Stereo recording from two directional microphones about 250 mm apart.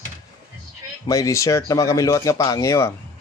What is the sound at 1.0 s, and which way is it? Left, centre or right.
Speech, centre.